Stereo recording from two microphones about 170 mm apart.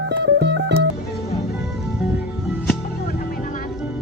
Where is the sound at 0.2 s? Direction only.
90° right.